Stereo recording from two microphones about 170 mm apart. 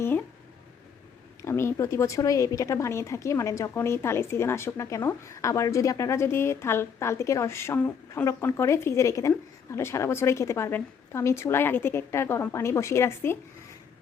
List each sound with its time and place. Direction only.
1.4 s speech: 15° left (ahead or behind)